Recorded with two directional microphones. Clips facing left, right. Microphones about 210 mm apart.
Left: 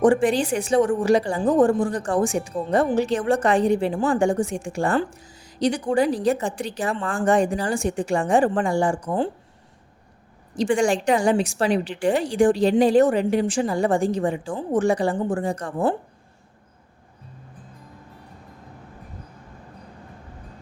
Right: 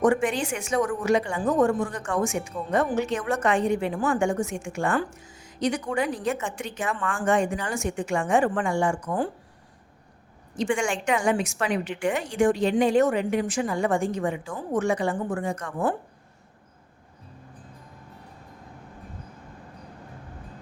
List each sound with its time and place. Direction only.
0.0 s speech: 30° left (ahead or behind)
10.5 s speech: 35° left (ahead or behind)